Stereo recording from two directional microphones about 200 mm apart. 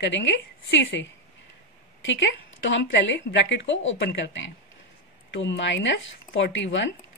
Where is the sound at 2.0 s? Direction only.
65° left (ahead or behind).